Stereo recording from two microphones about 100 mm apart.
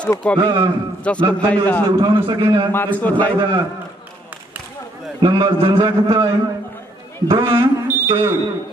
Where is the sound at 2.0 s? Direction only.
50° right (ahead or behind).